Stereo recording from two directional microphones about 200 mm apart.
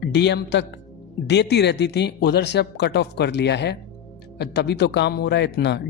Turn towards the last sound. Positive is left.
turn(degrees=60)  # may be behind; listen again after turning